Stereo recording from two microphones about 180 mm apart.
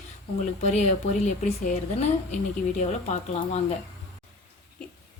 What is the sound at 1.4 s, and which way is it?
A woman's voice, 40° left (ahead or behind).